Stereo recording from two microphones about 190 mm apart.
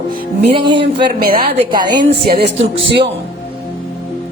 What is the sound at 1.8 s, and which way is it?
Speech, 25° right (ahead or behind).